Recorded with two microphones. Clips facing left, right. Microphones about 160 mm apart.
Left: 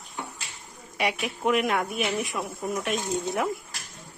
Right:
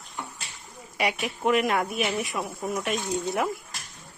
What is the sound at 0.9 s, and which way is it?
A woman's voice, centre (ahead or behind).